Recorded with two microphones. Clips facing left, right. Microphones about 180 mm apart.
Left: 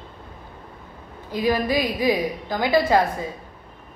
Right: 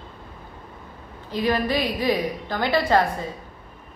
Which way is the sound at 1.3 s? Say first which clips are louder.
Left 1 dB; 10° left (ahead or behind).